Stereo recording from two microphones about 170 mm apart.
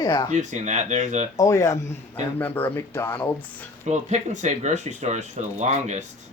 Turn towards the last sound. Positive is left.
turn(degrees=-40)  # may be behind; listen again after turning